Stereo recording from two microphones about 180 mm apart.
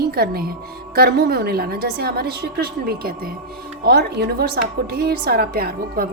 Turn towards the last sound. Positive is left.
turn(degrees=-55)  # may be behind; listen again after turning